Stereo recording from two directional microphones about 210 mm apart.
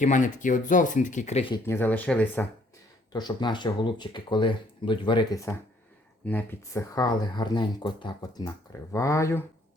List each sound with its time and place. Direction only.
0.0 s speech: 35° left (ahead or behind)
1.6 s speech: 10° left (ahead or behind)
3.1 s speech: 20° left (ahead or behind)